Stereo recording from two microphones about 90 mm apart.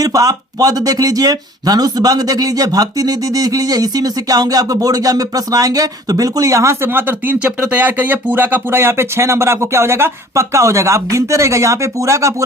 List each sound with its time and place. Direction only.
0.0 s speech: 40° right (ahead or behind)